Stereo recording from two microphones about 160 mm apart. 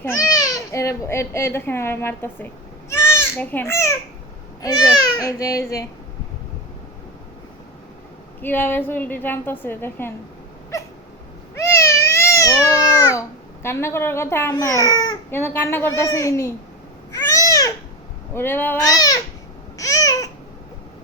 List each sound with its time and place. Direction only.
0.0 s a child's voice: 20° left (ahead or behind)
8.4 s a woman's voice: 10° left (ahead or behind)
10.7 s cat: 20° left (ahead or behind)
15.3 s a woman's voice: 15° left (ahead or behind)
17.1 s babbling: 20° left (ahead or behind)
18.3 s a woman's voice: 15° left (ahead or behind)
19.7 s babbling: 20° left (ahead or behind)